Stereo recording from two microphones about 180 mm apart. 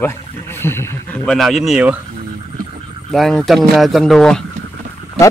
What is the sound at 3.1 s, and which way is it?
Speech, centre (ahead or behind).